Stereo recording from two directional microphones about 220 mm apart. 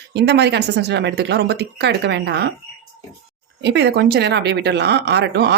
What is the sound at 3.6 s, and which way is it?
Speech, 50° right (ahead or behind).